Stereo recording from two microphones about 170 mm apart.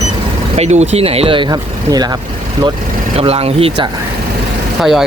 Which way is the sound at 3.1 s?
35° right (ahead or behind).